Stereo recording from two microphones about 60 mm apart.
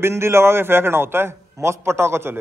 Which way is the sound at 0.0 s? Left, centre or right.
Right.